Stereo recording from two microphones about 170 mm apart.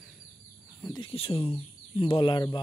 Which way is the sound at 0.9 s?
30° left (ahead or behind).